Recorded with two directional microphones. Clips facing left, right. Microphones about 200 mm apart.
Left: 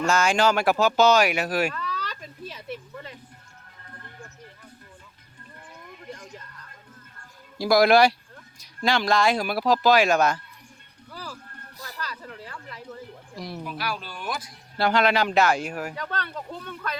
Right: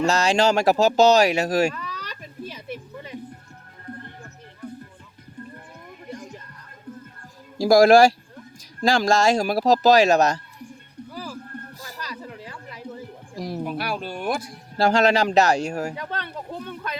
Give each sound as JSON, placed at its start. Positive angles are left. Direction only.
{"t": 0.0, "sound": "speech", "side_deg": -35}
{"t": 1.7, "sound": "a sound", "side_deg": -15}
{"t": 7.6, "sound": "speech", "side_deg": -40}
{"t": 11.1, "sound": "a sound", "side_deg": -15}
{"t": 13.3, "sound": "speech", "side_deg": -40}
{"t": 14.8, "sound": "speech", "side_deg": -40}